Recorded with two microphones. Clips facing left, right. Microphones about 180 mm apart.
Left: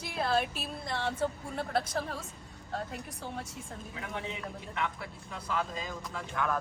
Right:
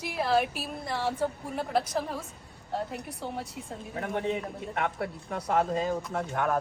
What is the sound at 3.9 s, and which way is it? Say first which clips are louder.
A man's voice: right 10 dB; 45° right (ahead or behind).